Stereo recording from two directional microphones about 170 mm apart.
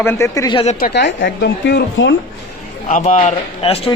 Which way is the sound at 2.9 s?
50° left (ahead or behind).